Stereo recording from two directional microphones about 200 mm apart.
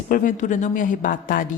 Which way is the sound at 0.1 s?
40° left (ahead or behind).